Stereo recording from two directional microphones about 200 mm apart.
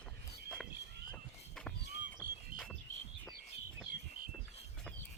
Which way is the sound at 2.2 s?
45° right (ahead or behind).